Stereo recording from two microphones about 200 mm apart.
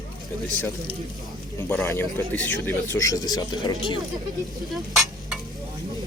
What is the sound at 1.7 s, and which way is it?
Speech, 10° left (ahead or behind).